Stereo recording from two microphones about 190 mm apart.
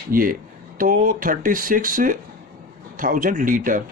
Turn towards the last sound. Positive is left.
turn(degrees=-45)  # may be behind; listen again after turning